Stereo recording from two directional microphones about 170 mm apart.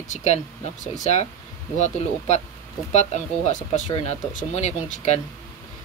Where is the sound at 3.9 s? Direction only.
35° left (ahead or behind).